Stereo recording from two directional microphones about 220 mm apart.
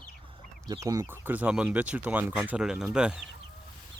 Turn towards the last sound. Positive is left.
turn(degrees=-5)  # may be behind; listen again after turning